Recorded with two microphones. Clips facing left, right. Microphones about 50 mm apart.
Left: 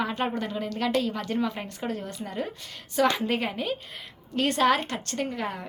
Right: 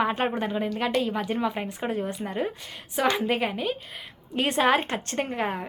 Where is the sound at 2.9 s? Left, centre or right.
Centre.